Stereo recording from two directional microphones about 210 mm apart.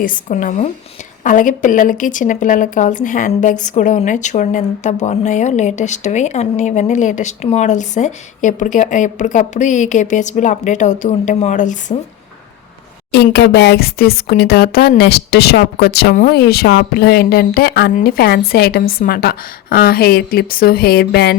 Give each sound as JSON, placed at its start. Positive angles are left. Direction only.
{"t": 0.0, "sound": "speech", "side_deg": 40}
{"t": 13.1, "sound": "a woman's voice", "side_deg": 50}